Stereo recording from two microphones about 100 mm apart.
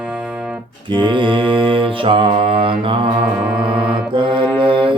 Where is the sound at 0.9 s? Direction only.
55° right (ahead or behind).